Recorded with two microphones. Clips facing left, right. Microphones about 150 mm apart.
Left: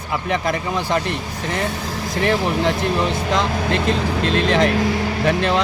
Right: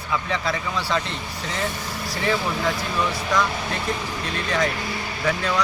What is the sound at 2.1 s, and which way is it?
Speech, 65° left (ahead or behind).